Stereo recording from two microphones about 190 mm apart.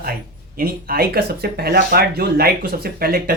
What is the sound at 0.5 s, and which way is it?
Speech, 50° right (ahead or behind).